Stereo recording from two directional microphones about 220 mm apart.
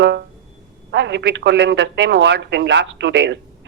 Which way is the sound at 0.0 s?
50° right (ahead or behind).